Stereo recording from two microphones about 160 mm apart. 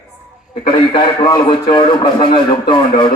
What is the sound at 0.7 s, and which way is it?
A man's voice, 30° left (ahead or behind).